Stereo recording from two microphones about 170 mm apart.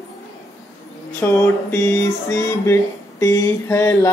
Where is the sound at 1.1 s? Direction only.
15° left (ahead or behind).